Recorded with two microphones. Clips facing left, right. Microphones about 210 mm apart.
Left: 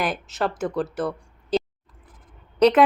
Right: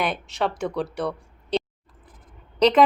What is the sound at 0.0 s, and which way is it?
A woman's voice, centre (ahead or behind).